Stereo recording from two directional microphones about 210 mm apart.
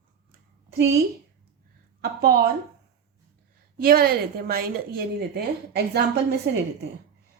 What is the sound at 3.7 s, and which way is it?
A woman's voice, 45° right (ahead or behind).